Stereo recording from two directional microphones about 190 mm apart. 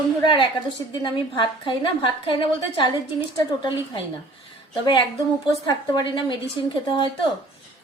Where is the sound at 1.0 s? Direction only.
25° left (ahead or behind).